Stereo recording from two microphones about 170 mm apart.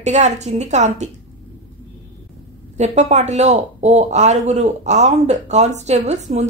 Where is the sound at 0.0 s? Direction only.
40° right (ahead or behind).